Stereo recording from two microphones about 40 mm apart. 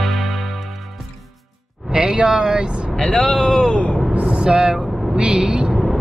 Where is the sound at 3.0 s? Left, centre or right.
Left.